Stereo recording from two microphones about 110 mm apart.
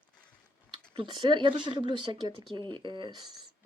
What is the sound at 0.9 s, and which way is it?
Speech, 45° right (ahead or behind).